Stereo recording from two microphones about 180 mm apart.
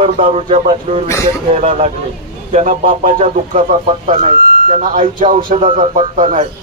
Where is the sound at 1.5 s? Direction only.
35° right (ahead or behind).